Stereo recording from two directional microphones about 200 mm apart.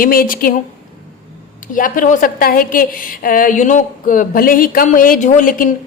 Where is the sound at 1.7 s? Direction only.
40° left (ahead or behind).